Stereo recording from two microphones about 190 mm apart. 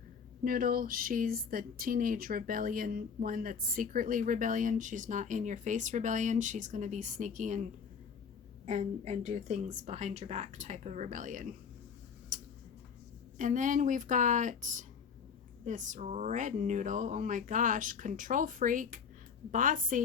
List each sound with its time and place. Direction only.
0.4 s speech: 50° right (ahead or behind)
12.3 s tick-tock: 40° right (ahead or behind)
13.4 s speech: 40° right (ahead or behind)